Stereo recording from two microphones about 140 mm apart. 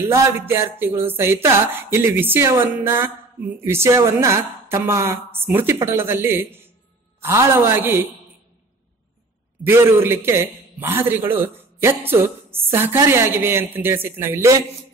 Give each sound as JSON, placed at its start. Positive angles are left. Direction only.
{"t": 0.1, "sound": "speech", "side_deg": -20}
{"t": 9.6, "sound": "speech", "side_deg": -15}